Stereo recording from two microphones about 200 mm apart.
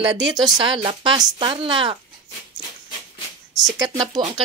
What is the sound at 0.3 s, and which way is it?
Speech, 20° right (ahead or behind).